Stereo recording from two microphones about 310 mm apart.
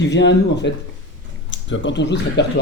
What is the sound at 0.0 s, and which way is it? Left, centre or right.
Speech, left.